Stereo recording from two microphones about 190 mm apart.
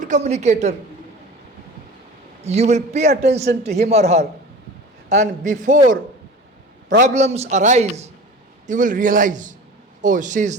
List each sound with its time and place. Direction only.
0.1 s a woman's voice: 35° right (ahead or behind)
2.4 s a woman's voice: 35° right (ahead or behind)
7.1 s a woman's voice: 35° right (ahead or behind)